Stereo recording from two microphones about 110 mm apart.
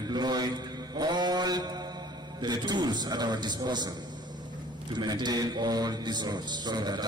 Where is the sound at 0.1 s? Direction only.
40° right (ahead or behind).